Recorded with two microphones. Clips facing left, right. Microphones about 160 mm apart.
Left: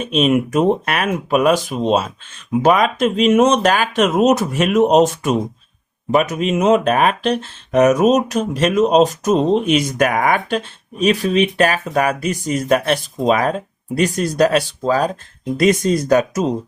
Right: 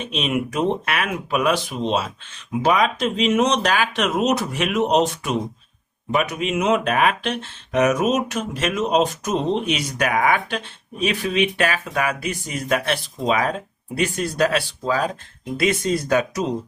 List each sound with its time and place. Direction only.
0.0 s speech: 45° left (ahead or behind)